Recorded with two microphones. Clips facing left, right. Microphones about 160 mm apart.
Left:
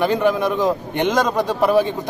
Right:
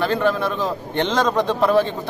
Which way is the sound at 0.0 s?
15° left (ahead or behind).